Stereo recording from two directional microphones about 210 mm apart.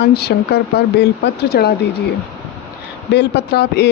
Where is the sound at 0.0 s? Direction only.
50° left (ahead or behind).